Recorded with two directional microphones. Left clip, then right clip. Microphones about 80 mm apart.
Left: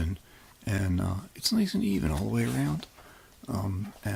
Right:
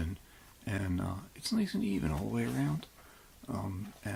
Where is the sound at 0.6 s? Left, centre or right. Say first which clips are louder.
Left 5 dB; left.